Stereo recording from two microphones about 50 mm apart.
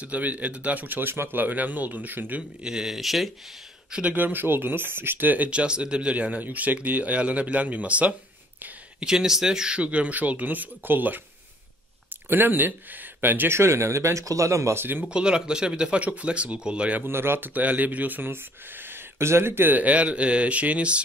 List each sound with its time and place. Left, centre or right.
0.0 s speech: right
2.6 s speech: centre
3.9 s speech: right
4.2 s speech: right
5.5 s speech: right
9.0 s speech: centre; by 11.1 s right
12.3 s speech: right
13.5 s speech: right
14.8 s speech: right
15.0 s speech: centre
17.0 s speech: right
17.6 s speech: right